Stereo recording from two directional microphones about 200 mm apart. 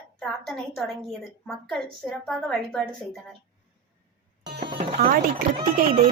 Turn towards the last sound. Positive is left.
turn(degrees=-25)  # may be behind; listen again after turning